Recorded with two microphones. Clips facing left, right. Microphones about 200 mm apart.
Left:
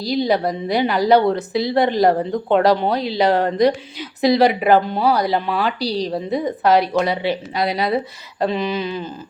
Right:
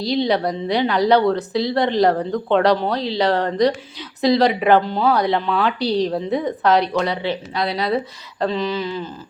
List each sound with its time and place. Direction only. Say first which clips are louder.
0.3 s speech: left 1 dB; 5° left (ahead or behind)